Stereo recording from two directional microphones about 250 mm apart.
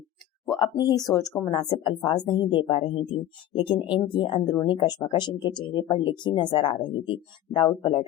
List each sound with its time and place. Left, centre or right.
0.4 s speech: centre
1.7 s speech: centre